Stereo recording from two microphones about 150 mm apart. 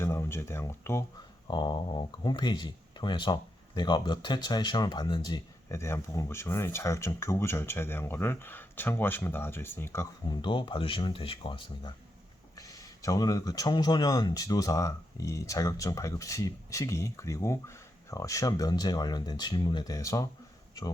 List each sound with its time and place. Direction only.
0.0 s speech: 15° left (ahead or behind)
1.5 s speech: 30° left (ahead or behind)
10.4 s speech: 35° left (ahead or behind)